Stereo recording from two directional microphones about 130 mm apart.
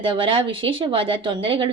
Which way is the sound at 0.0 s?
40° right (ahead or behind).